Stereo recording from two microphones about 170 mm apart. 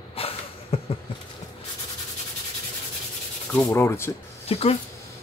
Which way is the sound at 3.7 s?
15° left (ahead or behind).